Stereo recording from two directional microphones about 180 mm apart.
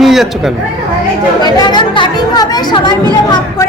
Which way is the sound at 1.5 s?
25° left (ahead or behind).